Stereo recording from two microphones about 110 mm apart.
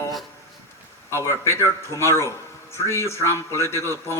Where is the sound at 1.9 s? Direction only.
30° left (ahead or behind).